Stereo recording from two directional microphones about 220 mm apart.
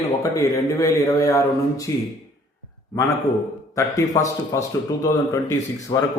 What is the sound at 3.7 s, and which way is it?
A man's voice, 15° left (ahead or behind).